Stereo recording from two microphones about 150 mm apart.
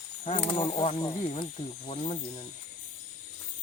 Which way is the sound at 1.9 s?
45° left (ahead or behind).